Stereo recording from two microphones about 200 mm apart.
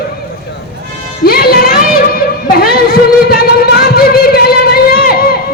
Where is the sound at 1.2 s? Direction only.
50° left (ahead or behind).